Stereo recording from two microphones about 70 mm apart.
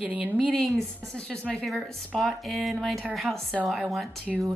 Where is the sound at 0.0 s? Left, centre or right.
Centre.